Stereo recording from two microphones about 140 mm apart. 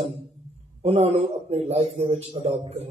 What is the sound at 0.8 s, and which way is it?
A man's voice, 50° right (ahead or behind).